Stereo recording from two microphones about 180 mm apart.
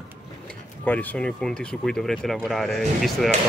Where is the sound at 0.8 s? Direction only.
10° left (ahead or behind).